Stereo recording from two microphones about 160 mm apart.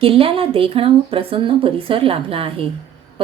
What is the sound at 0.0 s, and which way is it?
Speech, 35° right (ahead or behind).